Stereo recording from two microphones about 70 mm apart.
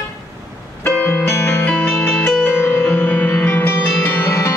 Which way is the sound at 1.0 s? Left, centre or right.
Left.